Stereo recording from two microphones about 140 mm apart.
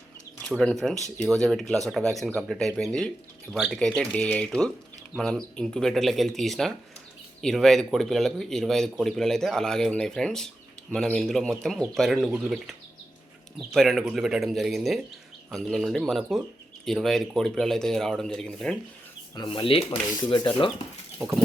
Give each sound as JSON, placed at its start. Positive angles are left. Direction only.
{"t": 0.6, "sound": "speech", "side_deg": 5}
{"t": 19.4, "sound": "speech", "side_deg": 40}